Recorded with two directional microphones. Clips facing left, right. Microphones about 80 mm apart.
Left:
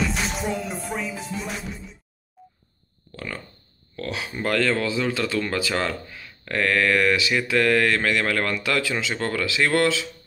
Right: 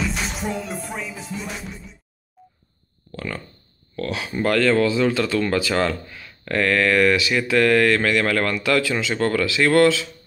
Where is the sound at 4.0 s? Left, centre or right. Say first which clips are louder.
Right 4 dB; centre.